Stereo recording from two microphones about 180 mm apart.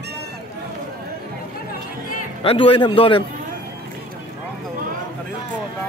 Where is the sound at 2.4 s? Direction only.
30° left (ahead or behind).